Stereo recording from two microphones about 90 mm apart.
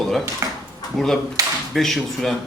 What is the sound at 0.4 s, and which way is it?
Dishes, 35° right (ahead or behind).